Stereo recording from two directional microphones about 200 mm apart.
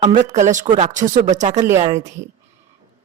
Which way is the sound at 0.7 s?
25° right (ahead or behind).